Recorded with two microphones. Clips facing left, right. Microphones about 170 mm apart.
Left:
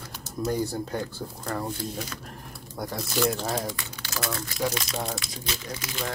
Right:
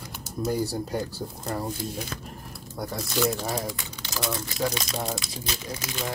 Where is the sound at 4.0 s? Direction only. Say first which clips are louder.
Right 2 dB; 15° right (ahead or behind).